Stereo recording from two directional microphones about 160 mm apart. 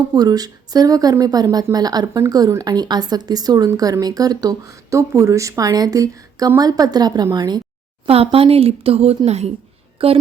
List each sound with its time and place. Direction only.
0.1 s speech: 25° right (ahead or behind)
8.0 s speech: 35° right (ahead or behind)